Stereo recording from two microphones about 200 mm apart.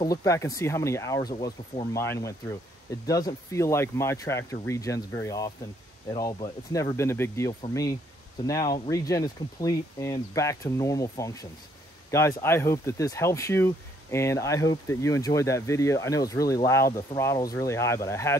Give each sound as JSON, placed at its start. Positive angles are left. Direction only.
{"t": 0.0, "sound": "speech", "side_deg": 15}